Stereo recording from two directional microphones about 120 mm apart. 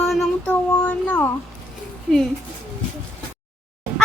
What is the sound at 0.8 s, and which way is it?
Speech, 15° left (ahead or behind).